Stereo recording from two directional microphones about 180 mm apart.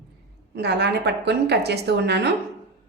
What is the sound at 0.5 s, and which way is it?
A woman's voice, 70° right (ahead or behind).